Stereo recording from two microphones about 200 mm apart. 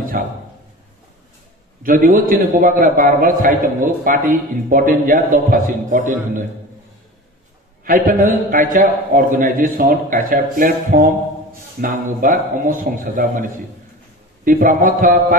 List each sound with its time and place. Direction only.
0.2 s a man's voice: 45° right (ahead or behind)
1.8 s a man's voice: 45° right (ahead or behind)
7.8 s a man's voice: 45° right (ahead or behind)